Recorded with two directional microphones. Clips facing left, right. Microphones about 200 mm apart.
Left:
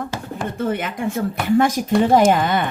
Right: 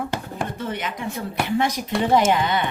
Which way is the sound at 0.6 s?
50° left (ahead or behind).